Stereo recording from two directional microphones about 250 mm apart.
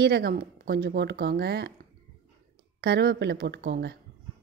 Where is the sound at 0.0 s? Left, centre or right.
Right.